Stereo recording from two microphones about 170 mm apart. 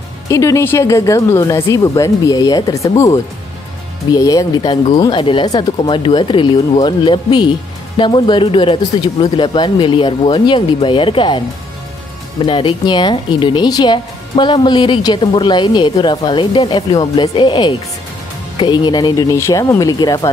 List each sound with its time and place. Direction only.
0.3 s speech: 20° left (ahead or behind)
4.1 s speech: 20° left (ahead or behind)
5.0 s speech: 30° left (ahead or behind)
12.4 s speech: 30° left (ahead or behind)